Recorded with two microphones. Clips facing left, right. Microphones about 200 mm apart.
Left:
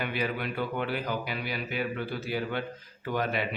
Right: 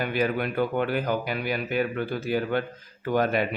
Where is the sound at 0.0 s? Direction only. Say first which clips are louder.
Right 6 dB; 45° right (ahead or behind).